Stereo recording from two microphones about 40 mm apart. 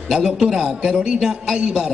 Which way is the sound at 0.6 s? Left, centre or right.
Centre.